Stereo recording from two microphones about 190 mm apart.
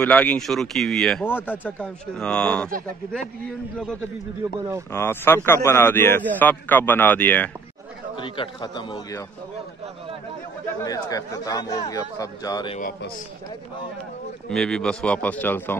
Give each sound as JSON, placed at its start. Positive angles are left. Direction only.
{"t": 0.0, "sound": "speech", "side_deg": 5}
{"t": 3.7, "sound": "speech", "side_deg": 5}
{"t": 8.2, "sound": "speech", "side_deg": 25}
{"t": 10.8, "sound": "speech", "side_deg": 20}
{"t": 12.7, "sound": "a man's voice", "side_deg": 50}
{"t": 14.5, "sound": "speech", "side_deg": 5}